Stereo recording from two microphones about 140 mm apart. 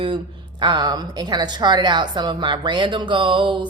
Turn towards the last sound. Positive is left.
turn(degrees=-35)  # may be behind; listen again after turning